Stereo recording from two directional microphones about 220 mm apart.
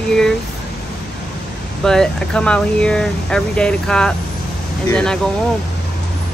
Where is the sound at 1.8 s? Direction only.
5° left (ahead or behind).